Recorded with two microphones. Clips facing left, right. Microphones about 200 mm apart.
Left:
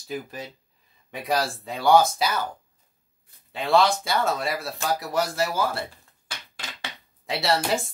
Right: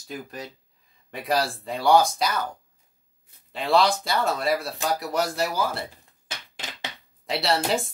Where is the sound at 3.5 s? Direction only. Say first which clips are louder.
Left 1 dB; centre (ahead or behind).